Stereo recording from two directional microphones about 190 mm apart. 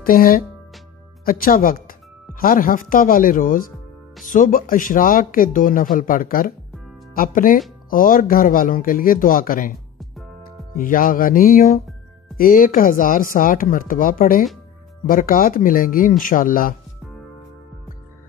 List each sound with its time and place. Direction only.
0.0 s speech: 50° left (ahead or behind)
10.8 s speech: 45° left (ahead or behind)